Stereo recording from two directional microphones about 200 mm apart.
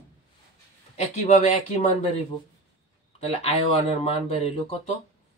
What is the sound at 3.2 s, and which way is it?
Speech, 30° left (ahead or behind).